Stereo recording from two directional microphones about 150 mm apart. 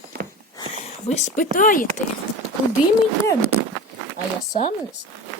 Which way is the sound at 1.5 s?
65° left (ahead or behind).